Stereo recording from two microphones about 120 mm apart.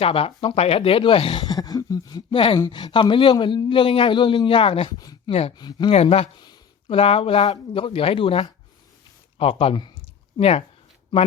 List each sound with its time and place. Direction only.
0.0 s a man's voice: 50° left (ahead or behind)
1.5 s a sound: 30° left (ahead or behind)
2.6 s a man's voice: 35° left (ahead or behind)
4.9 s a sound: 30° left (ahead or behind)
5.3 s speech: 55° left (ahead or behind)
5.5 s speech: 35° left (ahead or behind)
5.9 s a man's voice: 60° left (ahead or behind)
11.1 s speech: 40° left (ahead or behind)